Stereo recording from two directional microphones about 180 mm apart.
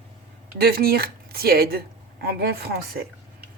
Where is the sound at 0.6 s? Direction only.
55° right (ahead or behind).